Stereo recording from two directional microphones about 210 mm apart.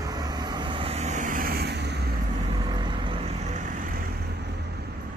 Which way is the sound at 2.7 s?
20° right (ahead or behind).